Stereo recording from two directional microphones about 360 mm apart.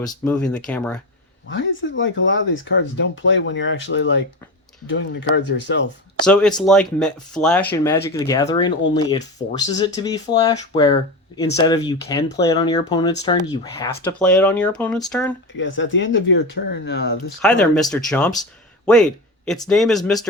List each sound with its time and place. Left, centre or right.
0.0 s speech: centre
1.5 s speech: left
6.2 s speech: centre
15.5 s speech: left
17.4 s speech: centre